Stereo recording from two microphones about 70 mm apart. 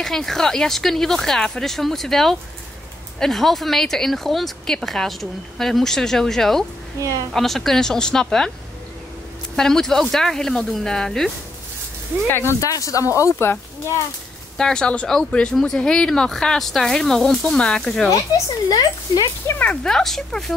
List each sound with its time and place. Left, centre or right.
0.0 s speech: centre
7.0 s a woman's voice: right
7.3 s speech: centre
9.6 s speech: centre
12.3 s speech: left
12.5 s speech: left
13.2 s speech: left
14.6 s speech: centre
18.7 s speech: left
19.6 s speech: left
19.9 s speech: centre